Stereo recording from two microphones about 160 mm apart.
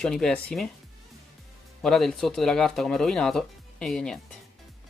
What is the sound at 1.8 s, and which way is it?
Speech, 5° left (ahead or behind).